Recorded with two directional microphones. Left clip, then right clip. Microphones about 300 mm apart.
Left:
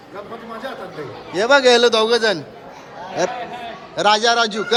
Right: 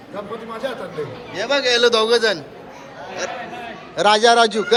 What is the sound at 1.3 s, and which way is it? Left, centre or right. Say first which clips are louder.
A man's voice: left 6 dB; left.